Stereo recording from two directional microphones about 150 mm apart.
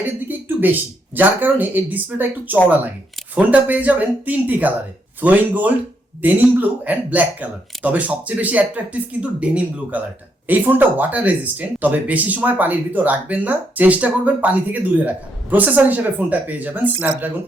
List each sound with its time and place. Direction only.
0.3 s speech: 10° right (ahead or behind)